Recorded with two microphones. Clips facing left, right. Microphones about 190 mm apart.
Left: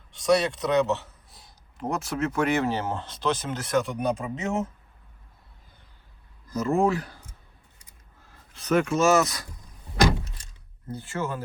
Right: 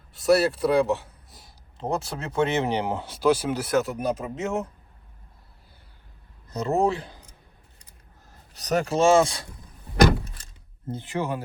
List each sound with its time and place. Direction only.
0.1 s speech: 5° right (ahead or behind)
1.8 s speech: 30° right (ahead or behind); by 4.5 s centre (ahead or behind)
6.5 s speech: 30° right (ahead or behind)
8.5 s speech: 40° right (ahead or behind)
10.9 s speech: 20° right (ahead or behind)